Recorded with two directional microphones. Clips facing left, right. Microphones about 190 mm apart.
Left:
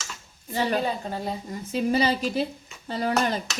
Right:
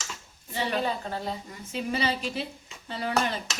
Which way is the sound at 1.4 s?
40° left (ahead or behind).